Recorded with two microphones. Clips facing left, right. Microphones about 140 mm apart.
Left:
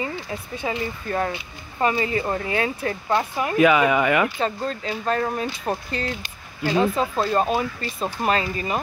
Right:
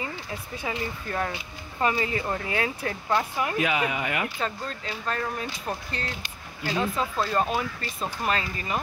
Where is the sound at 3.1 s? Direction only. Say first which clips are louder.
Left 3 dB; 20° left (ahead or behind).